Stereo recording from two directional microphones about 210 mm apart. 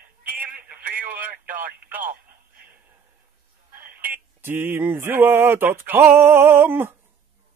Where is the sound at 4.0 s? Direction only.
10° right (ahead or behind).